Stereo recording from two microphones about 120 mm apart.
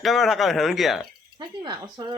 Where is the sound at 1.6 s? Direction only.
35° right (ahead or behind).